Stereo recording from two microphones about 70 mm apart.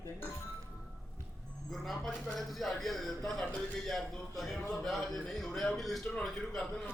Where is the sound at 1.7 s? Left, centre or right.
Centre.